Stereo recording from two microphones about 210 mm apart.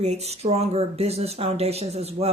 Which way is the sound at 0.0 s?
30° right (ahead or behind).